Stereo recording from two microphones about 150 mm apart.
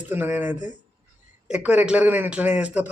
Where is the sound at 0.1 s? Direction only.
15° right (ahead or behind).